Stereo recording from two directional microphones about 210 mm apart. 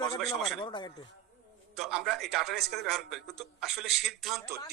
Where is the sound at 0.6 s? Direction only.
25° left (ahead or behind).